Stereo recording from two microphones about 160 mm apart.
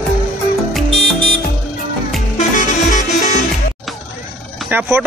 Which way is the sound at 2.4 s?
50° left (ahead or behind).